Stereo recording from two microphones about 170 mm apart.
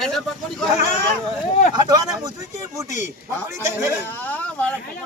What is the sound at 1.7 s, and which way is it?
Speech, 25° right (ahead or behind).